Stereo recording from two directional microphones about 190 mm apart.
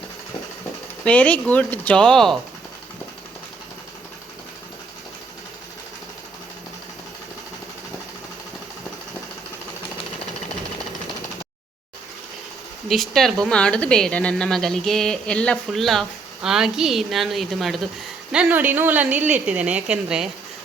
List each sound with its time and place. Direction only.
1.0 s speech: 10° left (ahead or behind)
12.9 s a woman's voice: centre (ahead or behind)